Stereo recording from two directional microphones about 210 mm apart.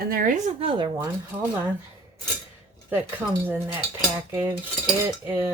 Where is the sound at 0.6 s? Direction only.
25° right (ahead or behind).